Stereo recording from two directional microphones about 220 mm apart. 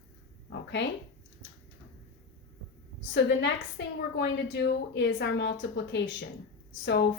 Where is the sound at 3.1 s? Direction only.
50° left (ahead or behind).